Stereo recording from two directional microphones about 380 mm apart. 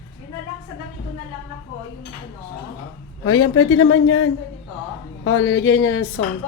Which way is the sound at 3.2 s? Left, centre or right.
Left.